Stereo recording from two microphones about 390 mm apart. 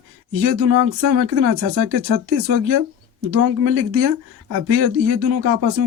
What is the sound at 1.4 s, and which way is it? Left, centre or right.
Speech, right.